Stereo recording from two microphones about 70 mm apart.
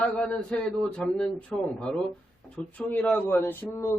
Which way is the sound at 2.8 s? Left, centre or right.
Centre.